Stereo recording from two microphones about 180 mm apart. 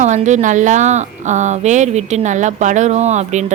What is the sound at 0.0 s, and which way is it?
A woman's voice, 40° right (ahead or behind).